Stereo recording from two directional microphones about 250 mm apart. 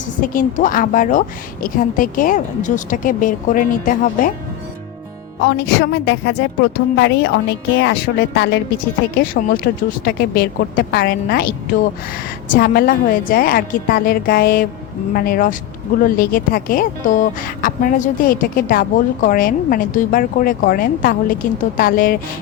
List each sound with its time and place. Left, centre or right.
0.2 s speech: left
5.5 s a woman's voice: left